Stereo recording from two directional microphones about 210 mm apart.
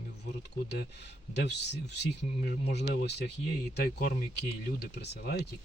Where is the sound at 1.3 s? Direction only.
55° left (ahead or behind).